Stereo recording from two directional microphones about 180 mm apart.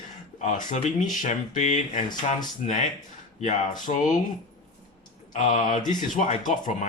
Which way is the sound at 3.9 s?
40° left (ahead or behind).